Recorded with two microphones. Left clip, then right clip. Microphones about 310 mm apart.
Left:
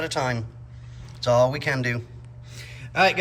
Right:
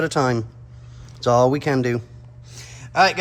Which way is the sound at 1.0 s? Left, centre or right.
Centre.